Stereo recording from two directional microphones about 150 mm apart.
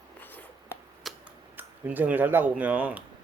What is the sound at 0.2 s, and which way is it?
Writing, 10° left (ahead or behind).